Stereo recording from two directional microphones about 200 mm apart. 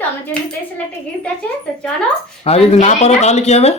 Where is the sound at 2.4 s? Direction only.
30° left (ahead or behind).